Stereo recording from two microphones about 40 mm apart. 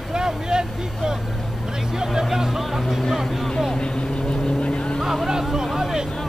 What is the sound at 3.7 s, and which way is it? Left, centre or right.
Vehicle, left.